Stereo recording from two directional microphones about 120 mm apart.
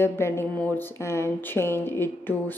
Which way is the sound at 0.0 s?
20° left (ahead or behind).